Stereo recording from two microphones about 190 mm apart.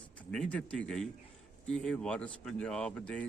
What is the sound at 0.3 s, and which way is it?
Speech, 5° left (ahead or behind).